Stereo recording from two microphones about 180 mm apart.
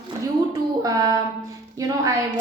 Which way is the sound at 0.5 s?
20° right (ahead or behind).